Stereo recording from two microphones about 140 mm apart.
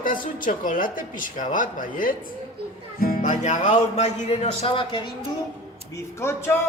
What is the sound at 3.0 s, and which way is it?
Music, 75° left (ahead or behind).